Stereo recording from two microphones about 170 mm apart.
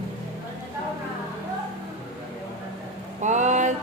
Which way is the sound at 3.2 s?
45° right (ahead or behind).